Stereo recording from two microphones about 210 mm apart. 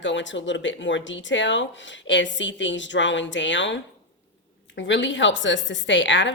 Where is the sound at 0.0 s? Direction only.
60° left (ahead or behind).